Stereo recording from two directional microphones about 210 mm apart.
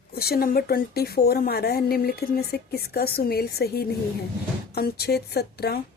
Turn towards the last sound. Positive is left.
turn(degrees=50)  # may be behind; listen again after turning